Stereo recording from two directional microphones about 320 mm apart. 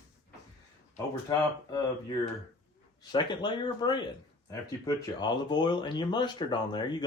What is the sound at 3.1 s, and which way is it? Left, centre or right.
Speech, centre.